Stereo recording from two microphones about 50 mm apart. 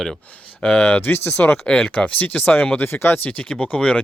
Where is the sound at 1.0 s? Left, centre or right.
Left.